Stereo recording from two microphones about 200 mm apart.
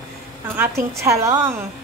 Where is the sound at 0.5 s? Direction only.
10° right (ahead or behind).